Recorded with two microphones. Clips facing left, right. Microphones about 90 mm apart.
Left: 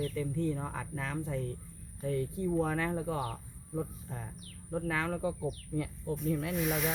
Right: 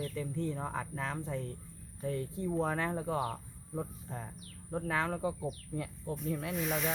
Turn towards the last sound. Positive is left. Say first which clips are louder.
# left 2 dB
turn(degrees=5)  # may be behind; listen again after turning